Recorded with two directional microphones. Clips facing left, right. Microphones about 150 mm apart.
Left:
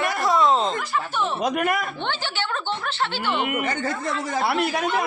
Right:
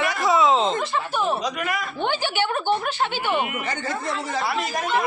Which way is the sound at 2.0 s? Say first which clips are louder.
Right 4 dB; 15° right (ahead or behind).